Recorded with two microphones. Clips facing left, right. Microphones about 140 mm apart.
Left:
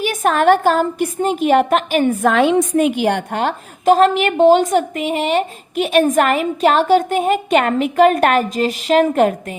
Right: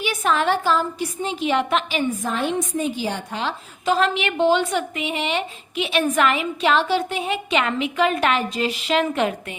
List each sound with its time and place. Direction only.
0.0 s a woman's voice: 45° left (ahead or behind)